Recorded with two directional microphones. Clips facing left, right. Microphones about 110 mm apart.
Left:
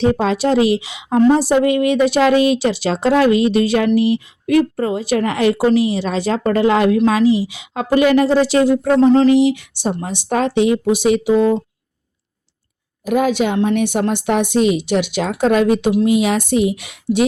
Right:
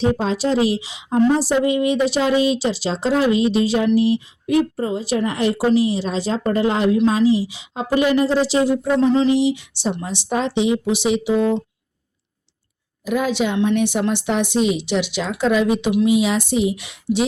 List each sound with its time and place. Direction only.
0.0 s a woman's voice: 65° left (ahead or behind)
9.0 s a sound: 40° left (ahead or behind)
9.4 s a woman's voice: 55° left (ahead or behind)
13.1 s a woman's voice: 55° left (ahead or behind)